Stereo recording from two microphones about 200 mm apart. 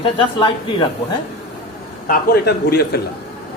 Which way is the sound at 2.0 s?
55° left (ahead or behind).